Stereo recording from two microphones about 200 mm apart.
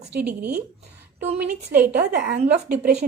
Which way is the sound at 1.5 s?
45° right (ahead or behind).